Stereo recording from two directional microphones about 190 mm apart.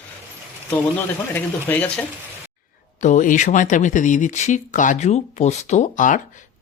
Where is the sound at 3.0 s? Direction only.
40° left (ahead or behind).